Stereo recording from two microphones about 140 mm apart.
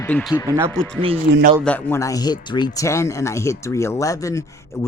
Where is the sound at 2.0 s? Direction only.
25° left (ahead or behind).